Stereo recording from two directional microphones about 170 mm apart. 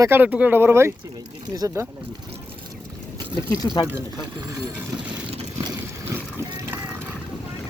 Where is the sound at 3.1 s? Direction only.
25° right (ahead or behind).